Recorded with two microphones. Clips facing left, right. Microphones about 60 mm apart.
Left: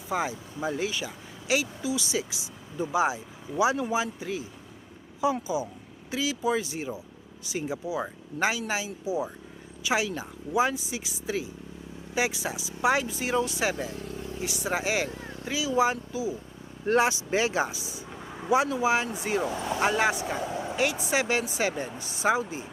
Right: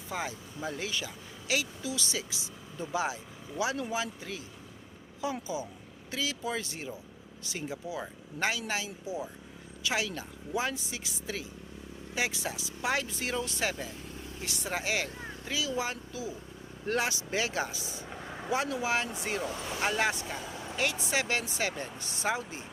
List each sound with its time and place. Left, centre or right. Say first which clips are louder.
0.1 s speech: left 7 dB; centre